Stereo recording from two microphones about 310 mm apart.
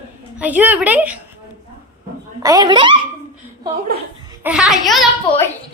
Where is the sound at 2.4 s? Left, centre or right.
Centre.